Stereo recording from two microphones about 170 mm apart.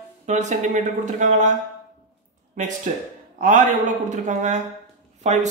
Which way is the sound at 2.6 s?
45° right (ahead or behind).